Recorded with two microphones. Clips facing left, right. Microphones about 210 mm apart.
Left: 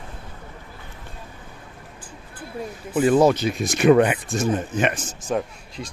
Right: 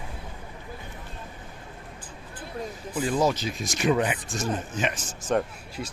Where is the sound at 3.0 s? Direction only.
60° left (ahead or behind).